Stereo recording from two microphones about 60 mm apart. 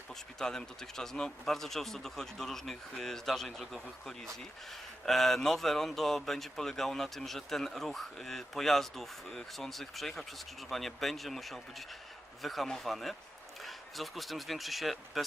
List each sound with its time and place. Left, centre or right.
0.1 s speech: centre